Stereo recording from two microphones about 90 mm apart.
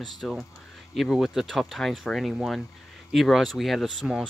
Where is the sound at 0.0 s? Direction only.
Centre (ahead or behind).